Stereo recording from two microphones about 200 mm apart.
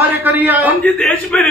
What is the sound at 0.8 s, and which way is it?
Speech, 5° left (ahead or behind).